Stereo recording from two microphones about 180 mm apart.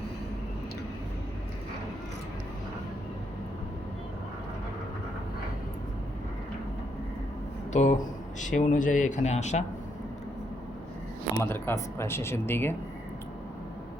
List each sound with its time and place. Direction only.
7.7 s speech: 40° left (ahead or behind)
11.3 s speech: 10° left (ahead or behind)